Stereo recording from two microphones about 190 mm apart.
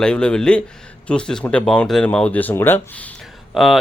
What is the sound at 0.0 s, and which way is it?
Speech, 5° left (ahead or behind).